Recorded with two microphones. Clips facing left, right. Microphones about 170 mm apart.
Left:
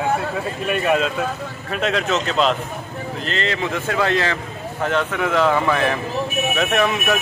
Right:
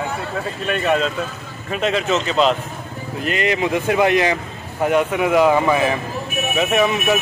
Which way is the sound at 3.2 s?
15° right (ahead or behind).